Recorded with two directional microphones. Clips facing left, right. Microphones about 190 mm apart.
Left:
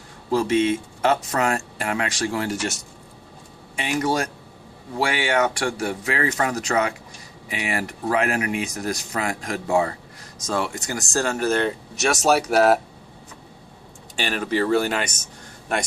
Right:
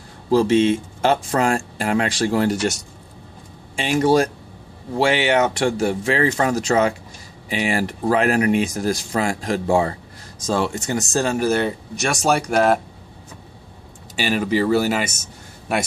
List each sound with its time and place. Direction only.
0.3 s speech: 30° right (ahead or behind)
3.8 s speech: 30° right (ahead or behind); by 12.8 s 5° left (ahead or behind)
14.2 s speech: 10° right (ahead or behind)